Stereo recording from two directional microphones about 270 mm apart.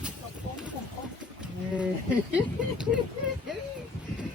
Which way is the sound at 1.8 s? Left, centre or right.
Centre.